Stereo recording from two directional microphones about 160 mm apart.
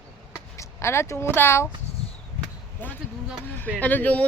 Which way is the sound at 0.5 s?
15° left (ahead or behind).